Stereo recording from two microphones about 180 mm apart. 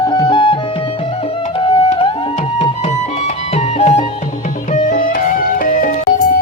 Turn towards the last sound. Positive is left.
turn(degrees=50)  # may be behind; listen again after turning